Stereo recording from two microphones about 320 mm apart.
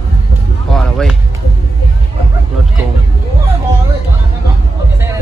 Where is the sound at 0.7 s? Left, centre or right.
Centre.